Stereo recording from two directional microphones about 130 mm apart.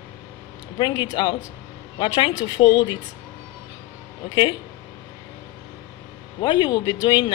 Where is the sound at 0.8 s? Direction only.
35° left (ahead or behind).